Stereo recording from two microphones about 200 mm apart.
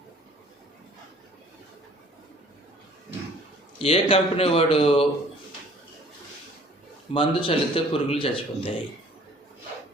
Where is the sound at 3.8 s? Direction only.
30° left (ahead or behind).